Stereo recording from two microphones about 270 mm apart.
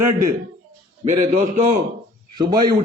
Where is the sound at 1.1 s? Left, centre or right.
Right.